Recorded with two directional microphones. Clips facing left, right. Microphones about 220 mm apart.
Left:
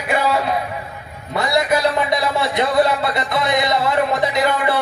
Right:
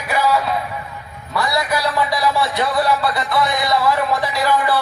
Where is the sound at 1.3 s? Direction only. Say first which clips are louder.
Left 3 dB; 20° left (ahead or behind).